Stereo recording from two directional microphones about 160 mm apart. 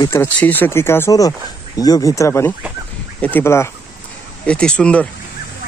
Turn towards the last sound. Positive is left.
turn(degrees=5)  # may be behind; listen again after turning